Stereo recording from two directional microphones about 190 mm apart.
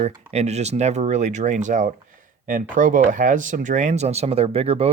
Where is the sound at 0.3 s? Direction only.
35° right (ahead or behind).